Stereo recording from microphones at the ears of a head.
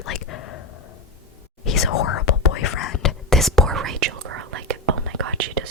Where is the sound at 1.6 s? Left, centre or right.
Left.